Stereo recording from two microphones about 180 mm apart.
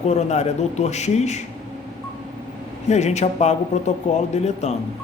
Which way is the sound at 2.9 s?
40° left (ahead or behind).